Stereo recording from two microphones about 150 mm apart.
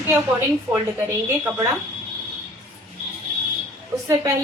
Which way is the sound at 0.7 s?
15° right (ahead or behind).